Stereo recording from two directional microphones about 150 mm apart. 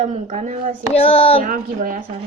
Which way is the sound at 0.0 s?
50° right (ahead or behind).